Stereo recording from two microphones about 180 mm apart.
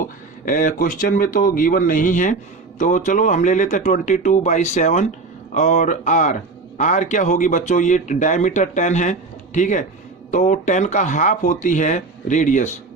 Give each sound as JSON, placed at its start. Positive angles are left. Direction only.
{"t": 0.4, "sound": "speech", "side_deg": 45}